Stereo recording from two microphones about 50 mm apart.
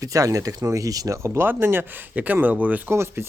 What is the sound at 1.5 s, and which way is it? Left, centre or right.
Speech, right.